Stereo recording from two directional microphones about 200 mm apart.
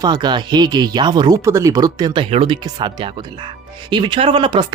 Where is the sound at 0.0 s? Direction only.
20° right (ahead or behind).